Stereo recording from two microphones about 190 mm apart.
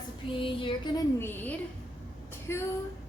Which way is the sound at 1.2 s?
10° left (ahead or behind).